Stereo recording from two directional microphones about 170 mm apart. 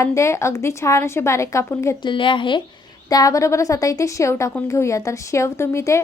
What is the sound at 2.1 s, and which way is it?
A woman's voice, 30° left (ahead or behind).